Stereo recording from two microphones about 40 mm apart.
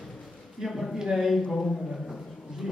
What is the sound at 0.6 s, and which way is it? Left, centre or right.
A man's voice, centre.